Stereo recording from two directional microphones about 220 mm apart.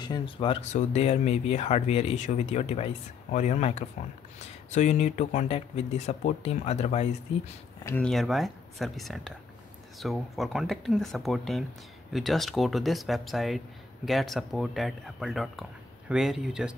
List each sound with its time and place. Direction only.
0.0 s speech: 20° left (ahead or behind)
7.8 s speech: 10° left (ahead or behind)
8.1 s speech: centre (ahead or behind)